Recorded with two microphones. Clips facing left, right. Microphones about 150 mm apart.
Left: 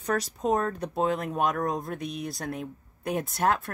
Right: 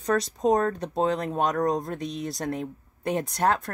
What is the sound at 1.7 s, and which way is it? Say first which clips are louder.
Speech: right 4 dB; centre (ahead or behind).